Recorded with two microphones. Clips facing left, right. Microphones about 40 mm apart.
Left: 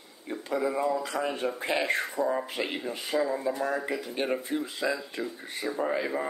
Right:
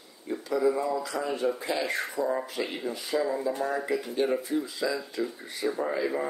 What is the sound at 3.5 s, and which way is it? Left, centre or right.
Mantra, left.